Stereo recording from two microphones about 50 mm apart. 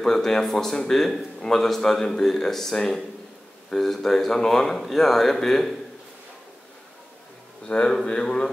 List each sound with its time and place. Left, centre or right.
0.0 s a man's voice: centre
7.6 s speech: centre